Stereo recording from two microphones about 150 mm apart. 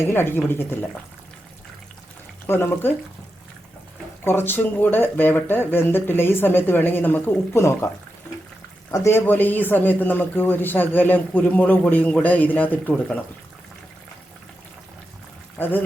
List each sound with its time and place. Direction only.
0.1 s a man's voice: 15° left (ahead or behind)
2.5 s a man's voice: 15° left (ahead or behind)
4.2 s a man's voice: 15° left (ahead or behind)
8.9 s a man's voice: 15° left (ahead or behind)
15.5 s speech: 15° left (ahead or behind)